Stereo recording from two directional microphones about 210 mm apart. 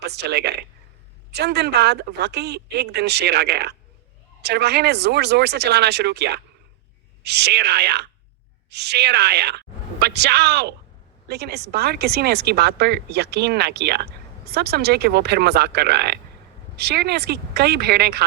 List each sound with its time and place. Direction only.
0.0 s speech: 50° right (ahead or behind)